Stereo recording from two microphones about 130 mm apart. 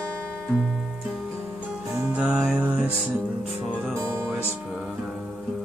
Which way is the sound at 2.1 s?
5° right (ahead or behind).